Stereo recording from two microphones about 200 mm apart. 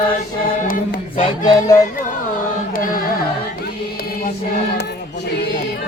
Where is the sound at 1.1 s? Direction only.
25° left (ahead or behind).